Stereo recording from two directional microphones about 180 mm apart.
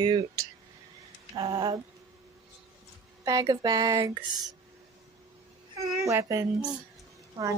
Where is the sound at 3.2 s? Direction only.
20° right (ahead or behind).